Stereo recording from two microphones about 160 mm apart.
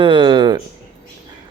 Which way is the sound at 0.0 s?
30° right (ahead or behind).